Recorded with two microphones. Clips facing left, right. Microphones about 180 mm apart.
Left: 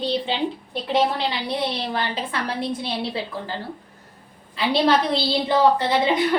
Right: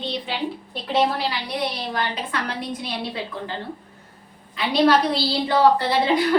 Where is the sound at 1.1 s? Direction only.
25° left (ahead or behind).